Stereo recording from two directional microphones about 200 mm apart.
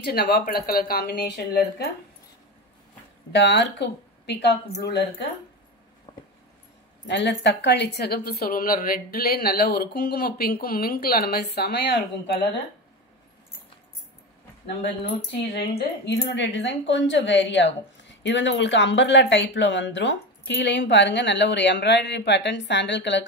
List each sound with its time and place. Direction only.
0.0 s a woman's voice: 50° left (ahead or behind)
3.3 s a woman's voice: 60° left (ahead or behind)
6.1 s a sound: 25° left (ahead or behind)
7.1 s a woman's voice: 60° left (ahead or behind)
14.7 s a woman's voice: 50° left (ahead or behind)
16.3 s a woman's voice: 65° left (ahead or behind)